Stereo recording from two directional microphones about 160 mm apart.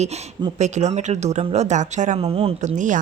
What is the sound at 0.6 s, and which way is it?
Speech, 45° right (ahead or behind).